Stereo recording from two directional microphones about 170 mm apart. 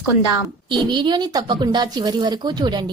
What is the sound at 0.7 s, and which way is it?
A woman's voice, 25° right (ahead or behind).